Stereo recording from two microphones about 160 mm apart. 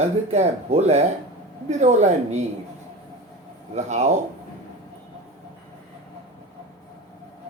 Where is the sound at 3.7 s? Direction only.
45° right (ahead or behind).